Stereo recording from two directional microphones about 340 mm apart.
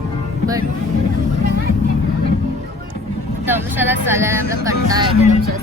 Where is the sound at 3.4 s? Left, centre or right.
Centre.